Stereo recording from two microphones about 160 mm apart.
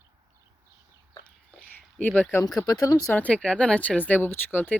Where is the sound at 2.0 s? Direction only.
10° left (ahead or behind).